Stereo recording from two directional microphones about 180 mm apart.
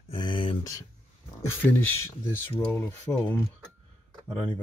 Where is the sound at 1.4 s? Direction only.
10° left (ahead or behind).